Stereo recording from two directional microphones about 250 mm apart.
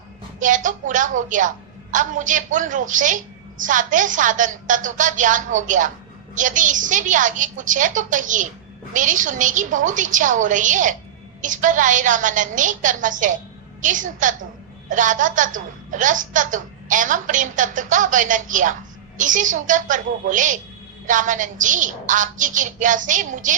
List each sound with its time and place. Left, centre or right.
0.3 s a woman's voice: right